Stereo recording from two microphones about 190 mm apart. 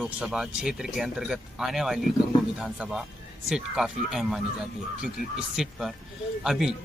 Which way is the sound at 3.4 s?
Centre (ahead or behind).